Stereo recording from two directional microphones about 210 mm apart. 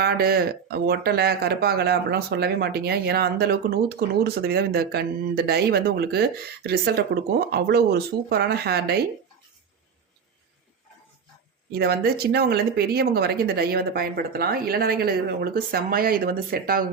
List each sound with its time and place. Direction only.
0.0 s speech: 50° right (ahead or behind)
11.7 s speech: 50° right (ahead or behind)